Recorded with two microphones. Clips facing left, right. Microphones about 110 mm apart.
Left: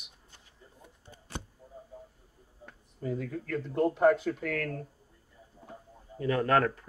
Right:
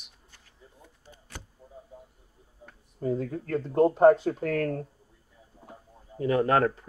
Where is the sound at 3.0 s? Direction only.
35° right (ahead or behind).